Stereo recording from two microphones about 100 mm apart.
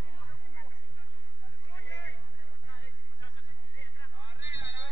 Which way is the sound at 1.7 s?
30° left (ahead or behind).